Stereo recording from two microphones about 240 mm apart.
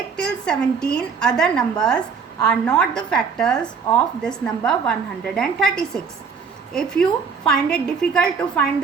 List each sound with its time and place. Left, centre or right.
0.2 s a woman's voice: centre